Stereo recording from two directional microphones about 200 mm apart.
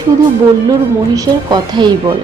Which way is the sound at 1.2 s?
20° right (ahead or behind).